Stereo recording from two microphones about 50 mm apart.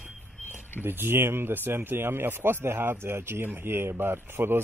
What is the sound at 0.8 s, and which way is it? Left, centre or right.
Speech, right.